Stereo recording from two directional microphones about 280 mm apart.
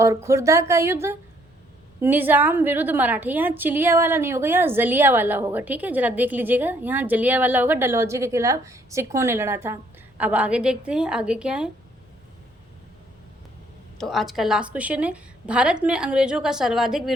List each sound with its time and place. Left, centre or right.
0.0 s a woman's voice: centre
14.0 s a woman's voice: centre